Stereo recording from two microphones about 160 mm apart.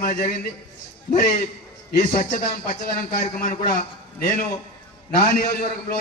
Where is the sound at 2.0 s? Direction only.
50° left (ahead or behind).